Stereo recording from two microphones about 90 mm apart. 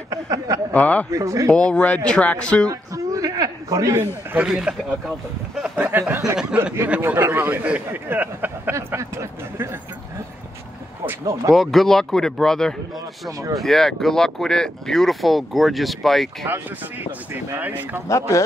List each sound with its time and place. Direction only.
0.1 s speech: 40° right (ahead or behind)
0.7 s speech: 15° left (ahead or behind)
1.1 s speech: 35° right (ahead or behind)
1.5 s speech: 10° left (ahead or behind)
2.7 s a sound: 40° right (ahead or behind)
4.0 s speech: 20° right (ahead or behind)
4.5 s a man's voice: 10° right (ahead or behind)
5.8 s speech: 20° right (ahead or behind)
11.5 s speech: centre (ahead or behind)
16.4 s speech: 20° right (ahead or behind)